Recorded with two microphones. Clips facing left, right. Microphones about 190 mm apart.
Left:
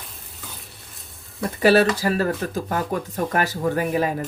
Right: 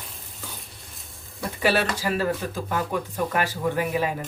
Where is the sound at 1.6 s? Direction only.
40° left (ahead or behind).